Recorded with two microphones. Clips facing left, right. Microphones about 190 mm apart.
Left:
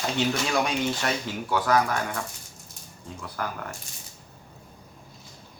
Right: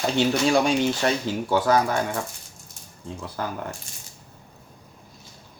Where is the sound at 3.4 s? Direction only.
25° right (ahead or behind).